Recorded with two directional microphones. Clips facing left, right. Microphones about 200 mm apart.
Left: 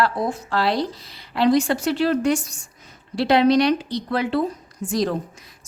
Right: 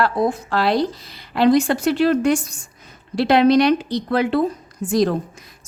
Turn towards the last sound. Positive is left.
turn(degrees=-50)  # may be behind; listen again after turning